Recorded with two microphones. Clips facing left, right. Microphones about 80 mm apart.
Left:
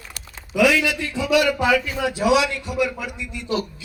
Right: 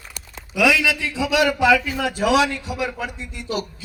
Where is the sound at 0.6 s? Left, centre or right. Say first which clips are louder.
Even; right.